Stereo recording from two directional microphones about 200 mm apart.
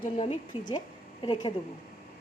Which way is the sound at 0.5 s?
25° left (ahead or behind).